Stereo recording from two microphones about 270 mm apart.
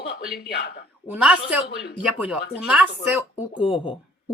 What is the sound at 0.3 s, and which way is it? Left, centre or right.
Speech, left.